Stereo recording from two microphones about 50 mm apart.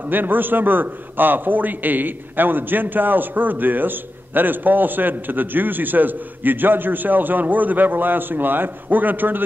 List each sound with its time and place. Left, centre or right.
0.1 s a man's voice: right